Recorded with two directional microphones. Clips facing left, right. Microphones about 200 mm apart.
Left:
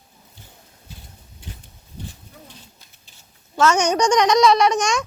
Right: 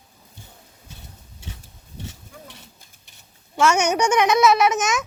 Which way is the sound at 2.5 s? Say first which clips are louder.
Even; 65° right (ahead or behind).